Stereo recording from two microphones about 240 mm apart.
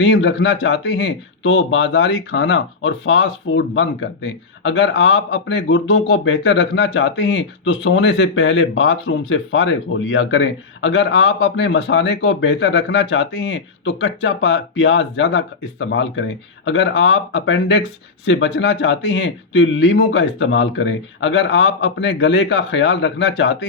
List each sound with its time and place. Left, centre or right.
0.0 s speech: left